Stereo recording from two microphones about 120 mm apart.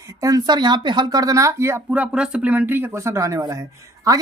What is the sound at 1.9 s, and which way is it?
Speech, 10° right (ahead or behind).